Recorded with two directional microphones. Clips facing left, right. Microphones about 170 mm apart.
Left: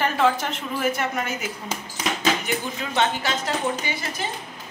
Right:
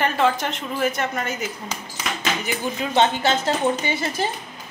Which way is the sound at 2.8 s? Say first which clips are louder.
Right 6 dB; 20° right (ahead or behind).